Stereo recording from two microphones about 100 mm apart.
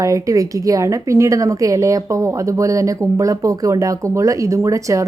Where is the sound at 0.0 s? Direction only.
35° right (ahead or behind).